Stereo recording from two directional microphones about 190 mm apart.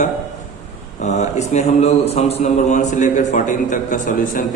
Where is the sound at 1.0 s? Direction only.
40° left (ahead or behind).